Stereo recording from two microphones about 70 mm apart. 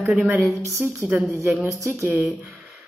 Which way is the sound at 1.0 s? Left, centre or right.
Right.